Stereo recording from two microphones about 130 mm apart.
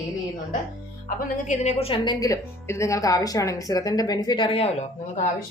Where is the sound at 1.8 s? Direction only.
45° left (ahead or behind).